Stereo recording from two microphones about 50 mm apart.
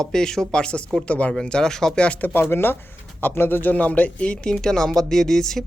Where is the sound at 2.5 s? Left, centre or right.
Left.